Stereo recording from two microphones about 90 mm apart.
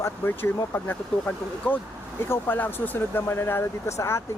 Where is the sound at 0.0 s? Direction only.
25° left (ahead or behind).